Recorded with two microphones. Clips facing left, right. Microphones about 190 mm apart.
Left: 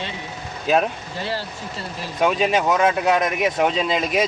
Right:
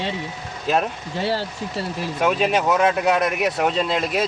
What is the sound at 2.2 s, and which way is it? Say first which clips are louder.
Speech: left 1 dB; centre (ahead or behind).